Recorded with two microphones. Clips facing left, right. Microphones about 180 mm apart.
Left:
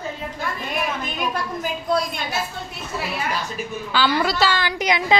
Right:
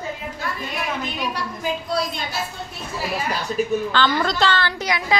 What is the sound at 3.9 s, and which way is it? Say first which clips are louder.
A woman's voice: left 4 dB; 10° left (ahead or behind).